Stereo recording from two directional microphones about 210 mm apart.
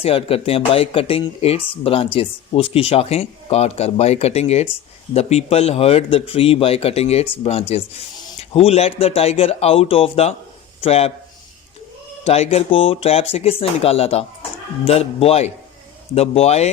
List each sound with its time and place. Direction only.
0.0 s speech: 30° left (ahead or behind)
12.2 s speech: 30° left (ahead or behind)